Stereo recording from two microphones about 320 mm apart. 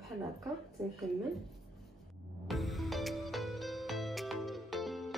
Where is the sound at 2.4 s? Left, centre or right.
Centre.